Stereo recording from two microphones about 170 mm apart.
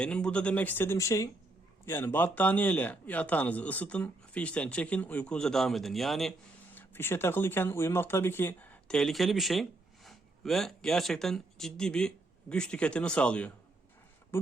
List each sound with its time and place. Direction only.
0.0 s speech: 5° left (ahead or behind)
6.7 s speech: 15° left (ahead or behind)